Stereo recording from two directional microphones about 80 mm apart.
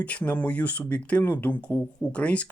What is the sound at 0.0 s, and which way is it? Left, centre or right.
Speech, centre.